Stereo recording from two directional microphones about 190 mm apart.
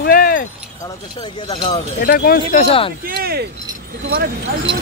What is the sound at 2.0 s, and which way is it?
Speech, 50° left (ahead or behind).